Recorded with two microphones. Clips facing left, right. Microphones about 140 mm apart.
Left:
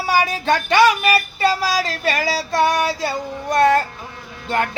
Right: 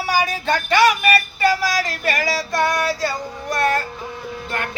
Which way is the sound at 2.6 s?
25° left (ahead or behind).